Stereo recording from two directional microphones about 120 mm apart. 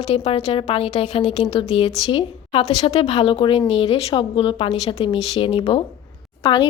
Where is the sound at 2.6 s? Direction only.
65° left (ahead or behind); by 6.7 s 45° left (ahead or behind).